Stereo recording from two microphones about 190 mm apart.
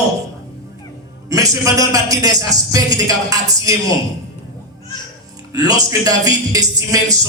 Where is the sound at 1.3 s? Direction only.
15° right (ahead or behind).